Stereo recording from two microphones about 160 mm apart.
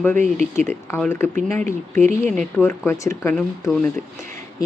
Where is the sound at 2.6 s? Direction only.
15° left (ahead or behind).